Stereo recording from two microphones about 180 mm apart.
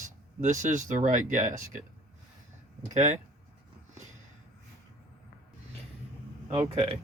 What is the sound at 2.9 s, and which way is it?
Speech, 40° right (ahead or behind).